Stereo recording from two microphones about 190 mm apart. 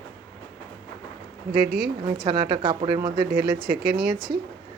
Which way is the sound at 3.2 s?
55° right (ahead or behind).